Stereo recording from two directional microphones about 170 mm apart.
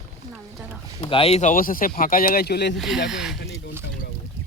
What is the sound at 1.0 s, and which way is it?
Speech, 30° left (ahead or behind).